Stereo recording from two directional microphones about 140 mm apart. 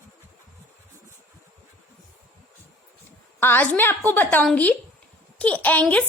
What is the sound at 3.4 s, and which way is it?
A woman's voice, 15° left (ahead or behind).